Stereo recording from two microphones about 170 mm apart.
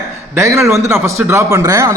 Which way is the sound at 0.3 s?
15° right (ahead or behind).